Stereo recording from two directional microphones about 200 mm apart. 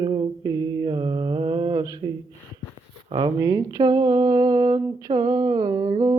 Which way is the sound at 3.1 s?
20° right (ahead or behind).